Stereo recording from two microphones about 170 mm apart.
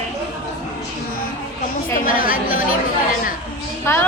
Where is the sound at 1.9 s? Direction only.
55° left (ahead or behind).